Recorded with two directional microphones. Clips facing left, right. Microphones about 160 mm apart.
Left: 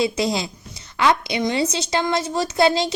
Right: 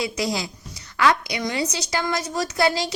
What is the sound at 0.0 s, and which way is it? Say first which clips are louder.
A woman's voice: left 4 dB; 25° left (ahead or behind).